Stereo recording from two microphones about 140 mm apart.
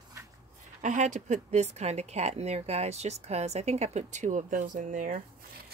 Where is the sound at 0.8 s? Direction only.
60° right (ahead or behind).